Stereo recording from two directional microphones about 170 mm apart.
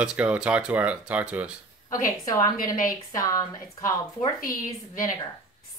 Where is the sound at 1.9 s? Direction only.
20° left (ahead or behind).